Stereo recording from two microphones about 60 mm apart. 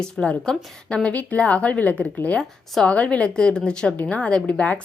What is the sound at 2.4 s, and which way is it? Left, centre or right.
Speech, centre.